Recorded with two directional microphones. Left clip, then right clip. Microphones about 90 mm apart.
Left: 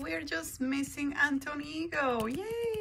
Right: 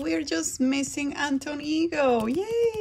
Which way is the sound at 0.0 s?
25° right (ahead or behind).